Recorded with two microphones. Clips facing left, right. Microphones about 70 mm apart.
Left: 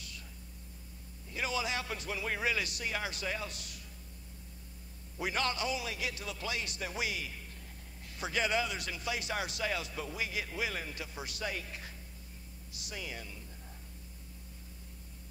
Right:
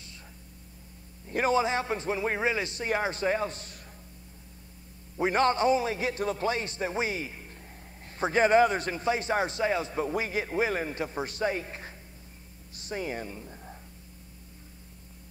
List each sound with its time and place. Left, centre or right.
1.3 s a man's voice: right
5.1 s a man's voice: right